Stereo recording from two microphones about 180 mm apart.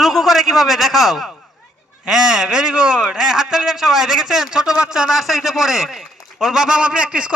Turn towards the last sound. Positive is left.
turn(degrees=-5)  # may be behind; listen again after turning